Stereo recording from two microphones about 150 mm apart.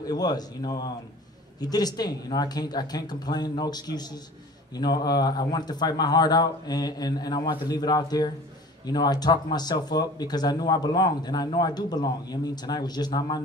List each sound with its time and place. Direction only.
0.1 s speech: 25° left (ahead or behind)